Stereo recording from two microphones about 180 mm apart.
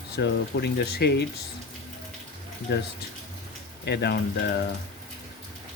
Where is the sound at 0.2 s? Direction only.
75° left (ahead or behind).